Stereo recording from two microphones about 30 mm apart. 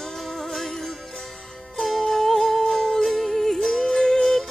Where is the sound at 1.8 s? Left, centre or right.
Centre.